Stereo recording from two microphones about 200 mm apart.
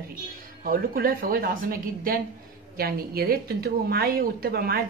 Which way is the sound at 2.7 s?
50° right (ahead or behind).